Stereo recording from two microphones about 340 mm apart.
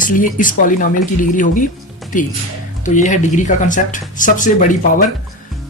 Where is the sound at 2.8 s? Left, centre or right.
Left.